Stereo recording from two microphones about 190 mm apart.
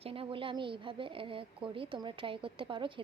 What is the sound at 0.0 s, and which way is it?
Speech, 30° right (ahead or behind).